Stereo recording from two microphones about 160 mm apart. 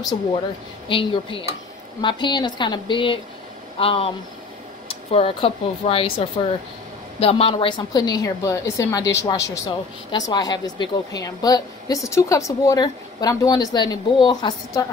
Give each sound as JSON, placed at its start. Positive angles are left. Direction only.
{"t": 0.8, "sound": "a woman's voice", "side_deg": 35}